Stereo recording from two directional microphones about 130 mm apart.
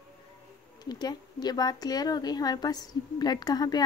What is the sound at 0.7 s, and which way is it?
A woman's voice, 30° left (ahead or behind).